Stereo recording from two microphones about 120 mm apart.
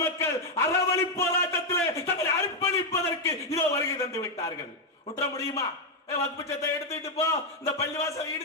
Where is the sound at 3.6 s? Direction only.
25° left (ahead or behind).